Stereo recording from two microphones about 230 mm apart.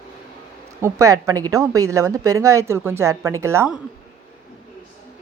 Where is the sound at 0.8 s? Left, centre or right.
Centre.